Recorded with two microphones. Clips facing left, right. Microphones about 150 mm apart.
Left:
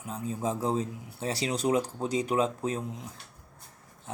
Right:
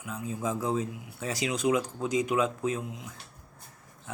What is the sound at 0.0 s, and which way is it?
Speech, 35° left (ahead or behind).